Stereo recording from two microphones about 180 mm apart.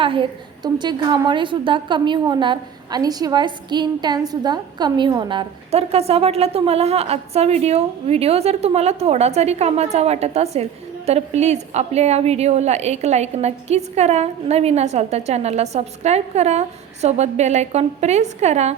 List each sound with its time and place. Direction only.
0.0 s a woman's voice: 30° right (ahead or behind)